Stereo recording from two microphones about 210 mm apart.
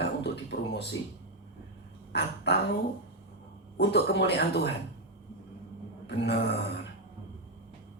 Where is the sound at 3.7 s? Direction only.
50° left (ahead or behind).